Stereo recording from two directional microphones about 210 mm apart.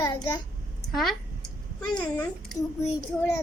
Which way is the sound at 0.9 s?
Centre (ahead or behind).